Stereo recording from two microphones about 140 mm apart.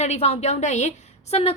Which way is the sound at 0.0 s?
50° left (ahead or behind).